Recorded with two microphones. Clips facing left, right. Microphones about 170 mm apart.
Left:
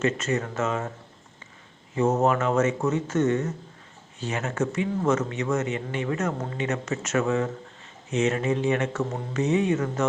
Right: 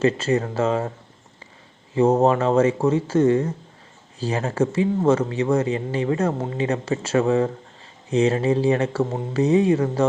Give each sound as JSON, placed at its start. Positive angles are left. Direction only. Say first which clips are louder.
{"t": 0.0, "sound": "speech", "louder": "right 5 dB", "side_deg": -30}
{"t": 2.0, "sound": "speech", "louder": "right 5 dB", "side_deg": -30}